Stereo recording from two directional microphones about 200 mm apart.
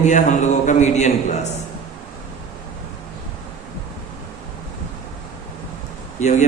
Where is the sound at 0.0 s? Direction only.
40° left (ahead or behind).